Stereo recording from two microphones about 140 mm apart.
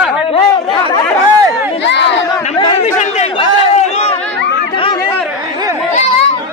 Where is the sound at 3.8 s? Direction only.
45° left (ahead or behind).